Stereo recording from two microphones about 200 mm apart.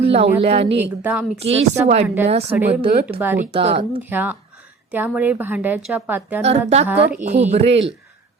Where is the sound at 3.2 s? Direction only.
10° right (ahead or behind).